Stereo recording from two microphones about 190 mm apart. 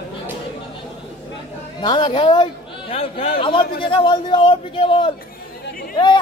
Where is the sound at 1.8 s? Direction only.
25° left (ahead or behind).